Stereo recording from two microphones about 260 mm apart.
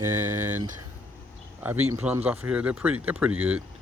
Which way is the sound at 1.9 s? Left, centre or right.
Centre.